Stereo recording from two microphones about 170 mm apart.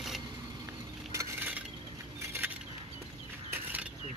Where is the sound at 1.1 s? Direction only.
15° right (ahead or behind).